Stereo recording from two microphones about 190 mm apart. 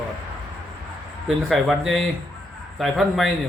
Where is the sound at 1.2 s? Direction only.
Centre (ahead or behind).